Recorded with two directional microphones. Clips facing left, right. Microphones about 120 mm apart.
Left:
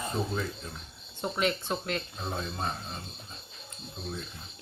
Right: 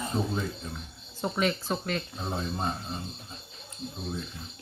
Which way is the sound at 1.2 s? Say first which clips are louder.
Right 1 dB; centre (ahead or behind).